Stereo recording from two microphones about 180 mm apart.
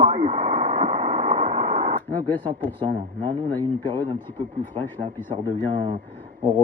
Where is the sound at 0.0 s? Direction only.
35° right (ahead or behind).